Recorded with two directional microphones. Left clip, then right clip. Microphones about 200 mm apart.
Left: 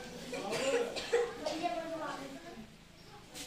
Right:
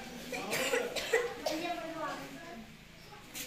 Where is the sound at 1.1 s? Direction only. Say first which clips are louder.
Even; 35° right (ahead or behind).